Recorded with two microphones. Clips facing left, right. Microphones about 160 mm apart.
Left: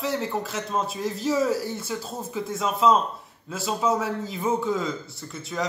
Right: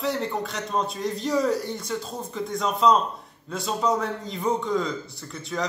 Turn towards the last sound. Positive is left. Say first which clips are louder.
# right 1 dB
turn(degrees=0)  # may be behind; listen again after turning